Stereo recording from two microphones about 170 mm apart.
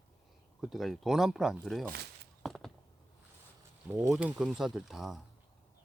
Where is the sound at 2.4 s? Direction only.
Centre (ahead or behind).